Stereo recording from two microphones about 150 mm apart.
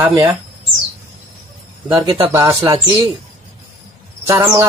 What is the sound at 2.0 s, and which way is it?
Speech, 20° right (ahead or behind).